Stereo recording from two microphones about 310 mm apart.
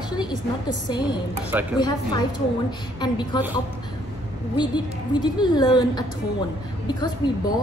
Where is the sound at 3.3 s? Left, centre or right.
Centre.